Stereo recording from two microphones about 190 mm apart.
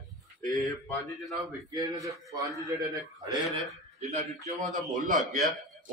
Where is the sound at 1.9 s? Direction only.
15° right (ahead or behind).